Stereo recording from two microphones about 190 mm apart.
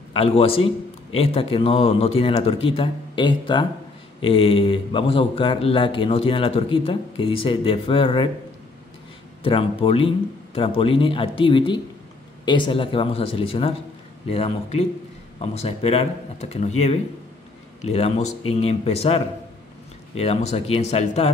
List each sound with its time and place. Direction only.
0.1 s speech: 30° left (ahead or behind)
9.4 s speech: 30° left (ahead or behind)